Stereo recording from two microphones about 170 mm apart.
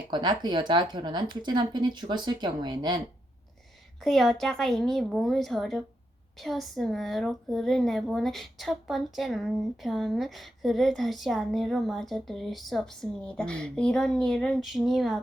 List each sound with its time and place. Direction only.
0.1 s a woman's voice: 25° right (ahead or behind)
4.0 s speech: centre (ahead or behind)